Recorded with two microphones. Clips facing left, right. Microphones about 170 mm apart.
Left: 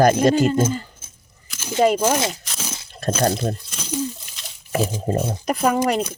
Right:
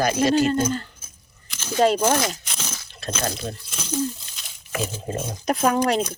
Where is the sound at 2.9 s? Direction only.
50° left (ahead or behind).